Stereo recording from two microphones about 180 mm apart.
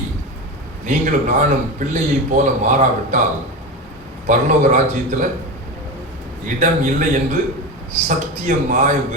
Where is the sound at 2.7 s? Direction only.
45° right (ahead or behind).